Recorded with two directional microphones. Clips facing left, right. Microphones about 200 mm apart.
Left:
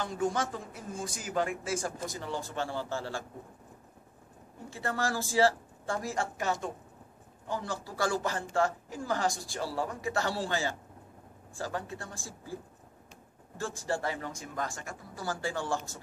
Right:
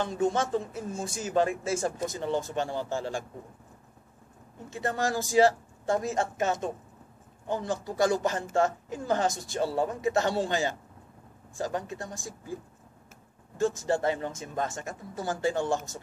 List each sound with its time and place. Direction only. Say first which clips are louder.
0.0 s speech: right 4 dB; 25° right (ahead or behind)
4.6 s speech: right 3 dB; 20° right (ahead or behind)
13.6 s speech: right 7 dB; 20° right (ahead or behind)